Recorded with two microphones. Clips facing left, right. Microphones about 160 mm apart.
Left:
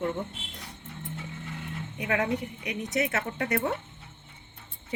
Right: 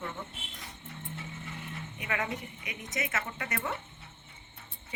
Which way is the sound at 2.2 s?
70° left (ahead or behind).